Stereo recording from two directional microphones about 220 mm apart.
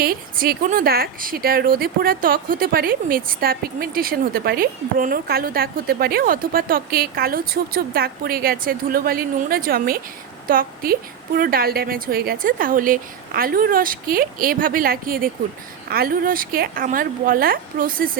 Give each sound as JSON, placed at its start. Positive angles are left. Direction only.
{"t": 0.0, "sound": "a woman's voice", "side_deg": -45}